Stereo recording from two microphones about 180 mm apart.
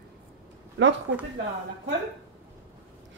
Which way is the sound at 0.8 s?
90° right.